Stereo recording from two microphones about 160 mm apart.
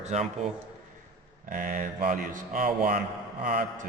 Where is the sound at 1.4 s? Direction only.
60° right (ahead or behind).